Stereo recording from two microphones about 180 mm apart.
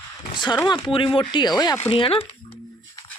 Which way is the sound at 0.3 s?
25° left (ahead or behind).